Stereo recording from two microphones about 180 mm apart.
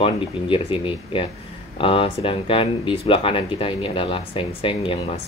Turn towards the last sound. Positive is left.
turn(degrees=30)  # may be behind; listen again after turning